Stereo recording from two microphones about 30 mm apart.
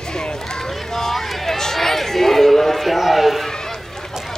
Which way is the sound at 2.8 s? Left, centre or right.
Centre.